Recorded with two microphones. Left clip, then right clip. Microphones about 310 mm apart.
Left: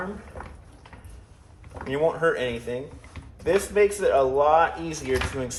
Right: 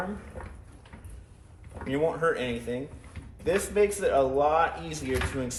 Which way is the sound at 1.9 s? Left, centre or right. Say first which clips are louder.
Left 4 dB; left.